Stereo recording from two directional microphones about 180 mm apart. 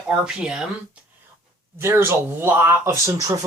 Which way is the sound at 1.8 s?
15° right (ahead or behind).